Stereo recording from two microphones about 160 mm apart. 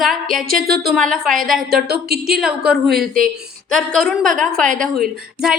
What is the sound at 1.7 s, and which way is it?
Speech, 85° right.